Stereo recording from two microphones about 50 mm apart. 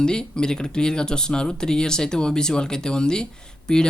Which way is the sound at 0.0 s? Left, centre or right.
Centre.